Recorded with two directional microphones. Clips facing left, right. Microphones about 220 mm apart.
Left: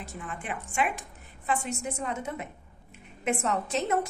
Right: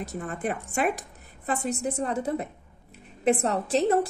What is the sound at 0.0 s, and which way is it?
A woman's voice, 40° right (ahead or behind).